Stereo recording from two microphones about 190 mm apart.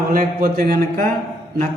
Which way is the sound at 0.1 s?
50° right (ahead or behind).